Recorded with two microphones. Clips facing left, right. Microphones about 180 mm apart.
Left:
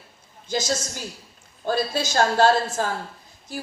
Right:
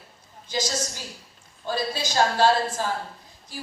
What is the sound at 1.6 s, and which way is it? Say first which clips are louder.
Speech: left 4 dB; 45° left (ahead or behind).